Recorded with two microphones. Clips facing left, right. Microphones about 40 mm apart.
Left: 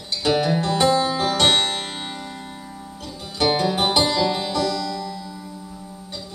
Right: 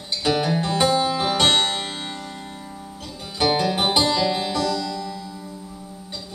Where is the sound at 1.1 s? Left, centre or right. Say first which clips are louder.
Even; centre.